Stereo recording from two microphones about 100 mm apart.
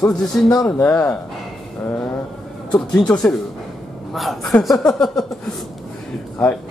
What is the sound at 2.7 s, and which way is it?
Speech, 10° left (ahead or behind).